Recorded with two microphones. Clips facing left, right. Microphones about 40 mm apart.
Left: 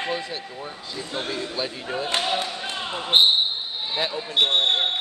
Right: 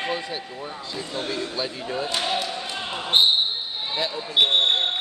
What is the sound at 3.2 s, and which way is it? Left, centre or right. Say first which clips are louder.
Speech: left 1 dB; left.